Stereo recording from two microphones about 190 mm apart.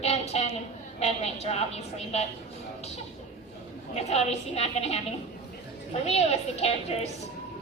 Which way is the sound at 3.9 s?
35° left (ahead or behind).